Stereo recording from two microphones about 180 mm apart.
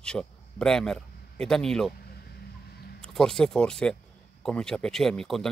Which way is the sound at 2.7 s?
60° left (ahead or behind).